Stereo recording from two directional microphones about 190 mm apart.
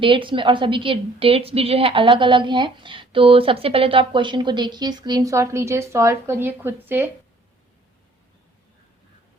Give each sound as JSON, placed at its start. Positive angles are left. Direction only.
{"t": 0.0, "sound": "a woman's voice", "side_deg": -25}